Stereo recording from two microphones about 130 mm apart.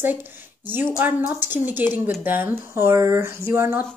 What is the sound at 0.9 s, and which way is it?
Speech, 15° right (ahead or behind).